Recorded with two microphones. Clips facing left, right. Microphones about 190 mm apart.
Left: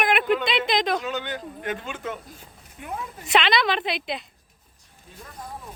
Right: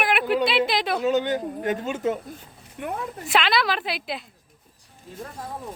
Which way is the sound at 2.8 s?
60° right (ahead or behind).